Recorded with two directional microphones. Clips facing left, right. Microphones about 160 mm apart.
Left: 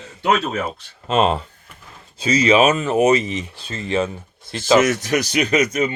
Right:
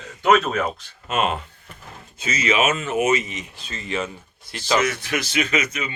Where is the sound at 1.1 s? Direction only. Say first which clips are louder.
Left 5 dB; 30° left (ahead or behind).